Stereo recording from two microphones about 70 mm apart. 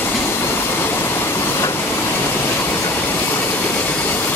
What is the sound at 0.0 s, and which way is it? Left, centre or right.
Train, left.